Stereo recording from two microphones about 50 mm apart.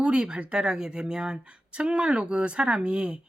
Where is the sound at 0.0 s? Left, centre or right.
Centre.